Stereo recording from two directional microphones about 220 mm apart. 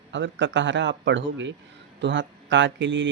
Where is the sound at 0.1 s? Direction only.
55° right (ahead or behind).